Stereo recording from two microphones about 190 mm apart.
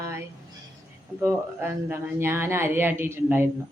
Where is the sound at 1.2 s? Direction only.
15° right (ahead or behind).